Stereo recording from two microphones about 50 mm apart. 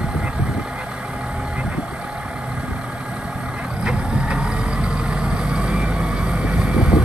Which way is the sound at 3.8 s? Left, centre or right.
Centre.